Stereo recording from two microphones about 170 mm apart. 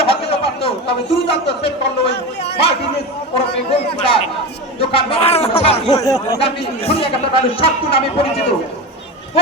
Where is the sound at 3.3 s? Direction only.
35° left (ahead or behind).